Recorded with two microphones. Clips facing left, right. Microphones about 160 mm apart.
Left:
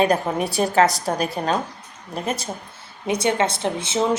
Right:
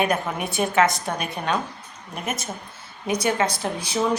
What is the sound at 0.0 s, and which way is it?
A woman's voice, 35° left (ahead or behind).